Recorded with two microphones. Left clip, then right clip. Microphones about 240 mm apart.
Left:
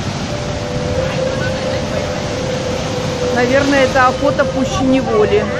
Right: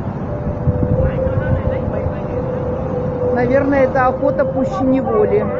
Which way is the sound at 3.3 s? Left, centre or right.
Left.